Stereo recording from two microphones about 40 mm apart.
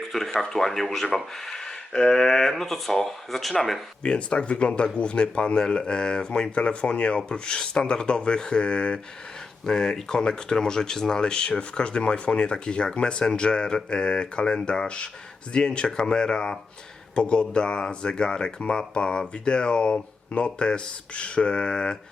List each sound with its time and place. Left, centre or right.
0.4 s speech: centre
4.0 s speech: left